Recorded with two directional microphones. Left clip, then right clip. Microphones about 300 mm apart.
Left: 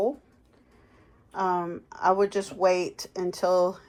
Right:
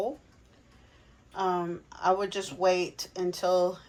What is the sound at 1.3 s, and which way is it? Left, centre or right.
Speech, left.